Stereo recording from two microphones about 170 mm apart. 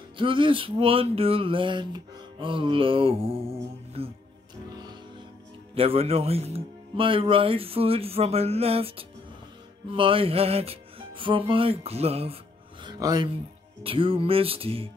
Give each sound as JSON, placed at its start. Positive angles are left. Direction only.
{"t": 0.2, "sound": "speech", "side_deg": -30}
{"t": 5.8, "sound": "speech", "side_deg": -35}
{"t": 12.8, "sound": "speech", "side_deg": -25}